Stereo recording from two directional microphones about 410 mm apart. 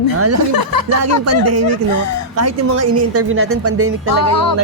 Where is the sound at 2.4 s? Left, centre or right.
Right.